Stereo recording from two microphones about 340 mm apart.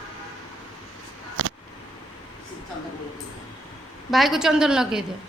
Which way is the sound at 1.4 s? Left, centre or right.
Right.